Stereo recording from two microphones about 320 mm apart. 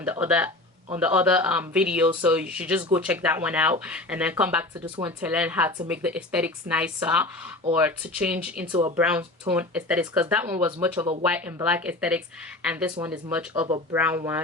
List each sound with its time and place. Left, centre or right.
0.0 s speech: centre